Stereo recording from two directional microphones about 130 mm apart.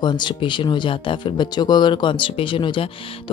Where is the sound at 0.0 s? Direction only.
35° left (ahead or behind).